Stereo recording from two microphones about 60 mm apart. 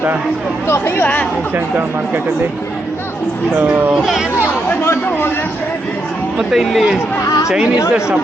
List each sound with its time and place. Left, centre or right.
0.7 s speech: left
3.6 s speech: right
6.5 s speech: centre